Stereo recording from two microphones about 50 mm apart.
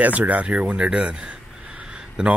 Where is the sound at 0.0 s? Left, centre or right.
Right.